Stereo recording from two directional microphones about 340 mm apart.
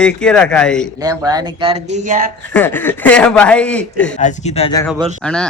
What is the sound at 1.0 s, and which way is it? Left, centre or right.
Speech, centre.